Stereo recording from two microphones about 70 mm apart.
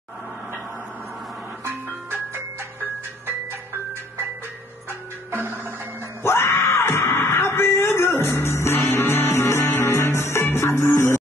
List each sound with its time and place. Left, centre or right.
1.6 s ice cream truck: right
4.8 s music: right
6.2 s screaming: left